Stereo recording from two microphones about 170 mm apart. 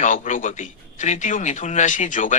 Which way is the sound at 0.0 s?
50° left (ahead or behind).